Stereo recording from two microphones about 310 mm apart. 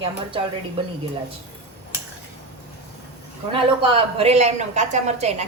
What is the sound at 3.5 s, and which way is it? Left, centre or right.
A woman's voice, centre.